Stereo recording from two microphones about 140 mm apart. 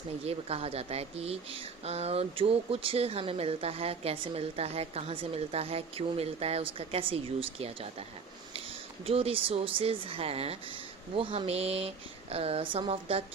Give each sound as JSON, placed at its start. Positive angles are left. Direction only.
{"t": 0.3, "sound": "speech", "side_deg": -45}
{"t": 9.0, "sound": "speech", "side_deg": -45}